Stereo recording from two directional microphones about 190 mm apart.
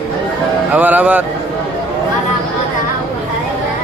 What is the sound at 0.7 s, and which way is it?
Speech, 10° right (ahead or behind).